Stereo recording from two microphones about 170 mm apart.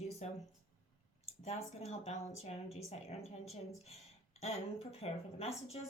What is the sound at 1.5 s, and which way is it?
Speech, 40° left (ahead or behind).